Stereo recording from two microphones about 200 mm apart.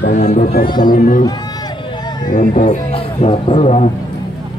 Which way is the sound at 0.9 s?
40° left (ahead or behind).